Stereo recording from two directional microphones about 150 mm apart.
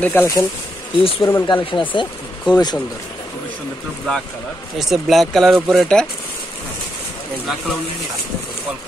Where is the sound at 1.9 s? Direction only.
35° left (ahead or behind).